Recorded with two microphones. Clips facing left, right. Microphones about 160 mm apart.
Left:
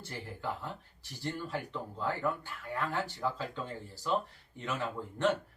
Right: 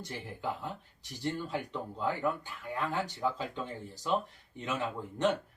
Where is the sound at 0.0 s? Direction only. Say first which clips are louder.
Right 2 dB; 15° right (ahead or behind).